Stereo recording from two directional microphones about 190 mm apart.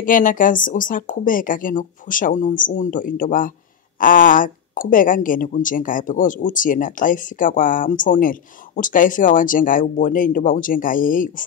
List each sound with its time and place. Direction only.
0.0 s speech: 45° left (ahead or behind)